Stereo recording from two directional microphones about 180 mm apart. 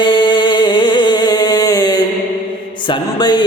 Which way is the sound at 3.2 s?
25° left (ahead or behind).